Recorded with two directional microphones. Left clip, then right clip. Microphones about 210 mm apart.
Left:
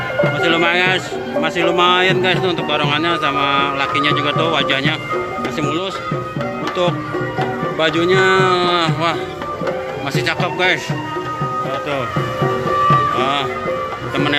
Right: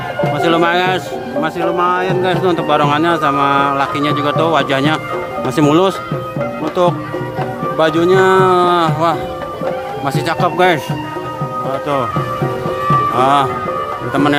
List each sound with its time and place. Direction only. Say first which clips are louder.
0.3 s speech: right 4 dB; 15° right (ahead or behind)
1.6 s speech: left 1 dB; centre (ahead or behind)
2.2 s speech: right 2 dB; 15° right (ahead or behind)
7.8 s speech: right 3 dB; 15° right (ahead or behind)
10.2 s speech: right 4 dB; 20° right (ahead or behind)
13.1 s speech: right 6 dB; 25° right (ahead or behind)